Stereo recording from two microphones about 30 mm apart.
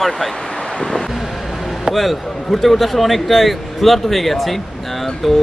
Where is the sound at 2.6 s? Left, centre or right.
Centre.